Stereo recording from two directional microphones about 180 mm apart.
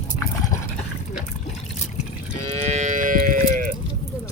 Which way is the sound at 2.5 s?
40° right (ahead or behind).